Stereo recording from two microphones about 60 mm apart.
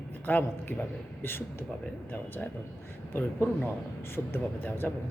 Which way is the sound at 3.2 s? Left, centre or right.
Left.